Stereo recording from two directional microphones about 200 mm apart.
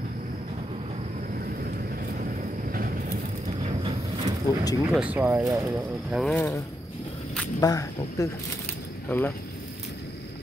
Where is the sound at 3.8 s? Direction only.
30° right (ahead or behind).